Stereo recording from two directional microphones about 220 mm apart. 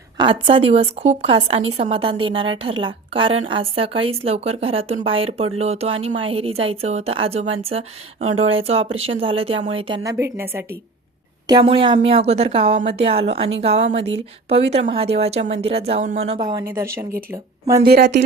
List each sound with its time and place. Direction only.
0.2 s a woman's voice: 25° right (ahead or behind)
11.4 s a woman's voice: 20° right (ahead or behind)
16.4 s a woman's voice: 20° right (ahead or behind)
17.8 s a woman's voice: 50° right (ahead or behind)